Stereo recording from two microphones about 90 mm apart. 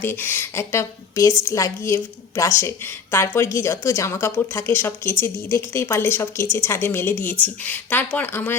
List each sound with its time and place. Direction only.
0.0 s a woman's voice: 25° left (ahead or behind)